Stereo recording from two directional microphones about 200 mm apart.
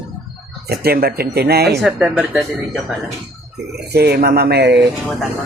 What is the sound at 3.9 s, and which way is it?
Speech, 50° right (ahead or behind).